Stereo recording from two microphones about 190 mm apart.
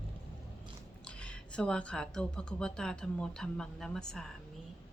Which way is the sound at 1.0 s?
5° left (ahead or behind).